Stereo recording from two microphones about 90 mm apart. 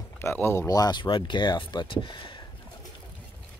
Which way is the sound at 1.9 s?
65° left (ahead or behind).